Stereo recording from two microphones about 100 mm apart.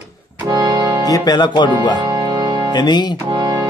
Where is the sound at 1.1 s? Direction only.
40° left (ahead or behind).